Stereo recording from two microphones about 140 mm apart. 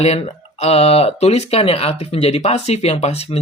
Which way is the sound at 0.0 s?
50° left (ahead or behind).